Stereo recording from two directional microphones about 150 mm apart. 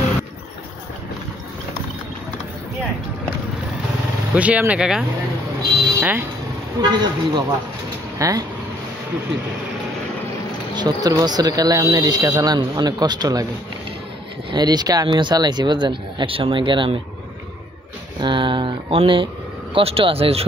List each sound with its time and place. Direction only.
4.4 s speech: 10° right (ahead or behind)
6.8 s speech: 30° right (ahead or behind)
10.7 s speech: 25° right (ahead or behind)
14.5 s speech: 25° right (ahead or behind)
18.2 s speech: 35° right (ahead or behind)